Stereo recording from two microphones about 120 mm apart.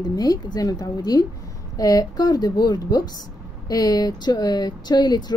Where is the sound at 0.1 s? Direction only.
30° left (ahead or behind).